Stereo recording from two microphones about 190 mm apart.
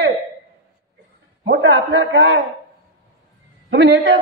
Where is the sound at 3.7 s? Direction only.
60° right (ahead or behind).